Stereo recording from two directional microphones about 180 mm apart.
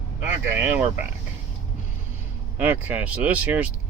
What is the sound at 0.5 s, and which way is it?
Speech, 10° right (ahead or behind).